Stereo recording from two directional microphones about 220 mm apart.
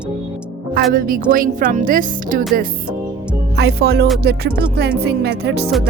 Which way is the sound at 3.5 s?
45° right (ahead or behind).